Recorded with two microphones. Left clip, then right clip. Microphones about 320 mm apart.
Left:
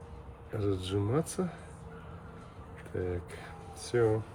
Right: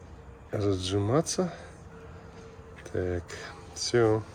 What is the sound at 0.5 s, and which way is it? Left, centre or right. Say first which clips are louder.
Speech: right 4 dB; centre.